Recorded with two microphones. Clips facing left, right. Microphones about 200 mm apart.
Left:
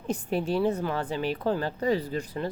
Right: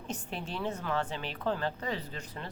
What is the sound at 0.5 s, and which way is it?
Speech, 35° left (ahead or behind).